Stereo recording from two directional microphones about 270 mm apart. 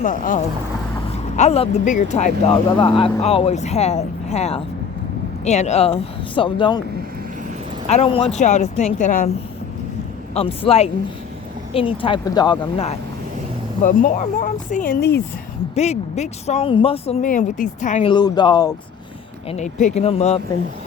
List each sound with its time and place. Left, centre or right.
0.0 s speech: left
7.9 s speech: left
10.3 s speech: left
18.1 s speech: centre
19.5 s speech: left